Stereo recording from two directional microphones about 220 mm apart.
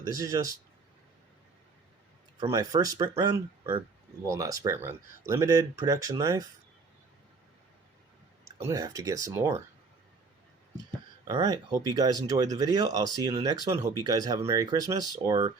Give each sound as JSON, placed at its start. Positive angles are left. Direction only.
{"t": 0.0, "sound": "speech", "side_deg": -15}
{"t": 2.4, "sound": "speech", "side_deg": -15}
{"t": 8.5, "sound": "speech", "side_deg": -15}
{"t": 11.3, "sound": "speech", "side_deg": -20}